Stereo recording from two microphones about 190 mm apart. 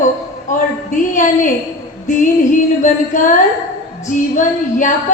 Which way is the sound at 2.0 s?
40° left (ahead or behind).